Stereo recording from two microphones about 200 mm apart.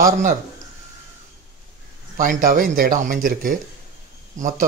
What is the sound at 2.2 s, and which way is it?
A man's voice, 40° right (ahead or behind).